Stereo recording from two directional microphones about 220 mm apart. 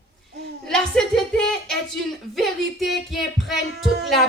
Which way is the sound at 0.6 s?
Centre (ahead or behind).